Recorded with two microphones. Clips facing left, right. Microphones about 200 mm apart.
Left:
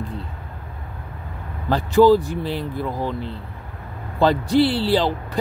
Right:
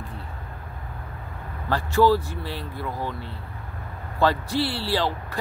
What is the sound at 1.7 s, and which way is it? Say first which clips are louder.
Speech: left 6 dB; 20° left (ahead or behind).